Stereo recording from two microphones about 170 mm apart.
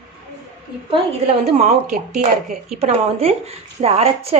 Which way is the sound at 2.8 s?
35° right (ahead or behind).